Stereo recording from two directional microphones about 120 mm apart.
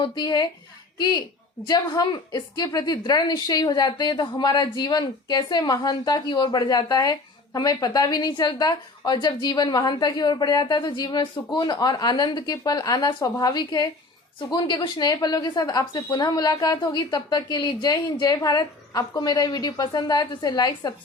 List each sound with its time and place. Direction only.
0.0 s a woman's voice: 35° left (ahead or behind)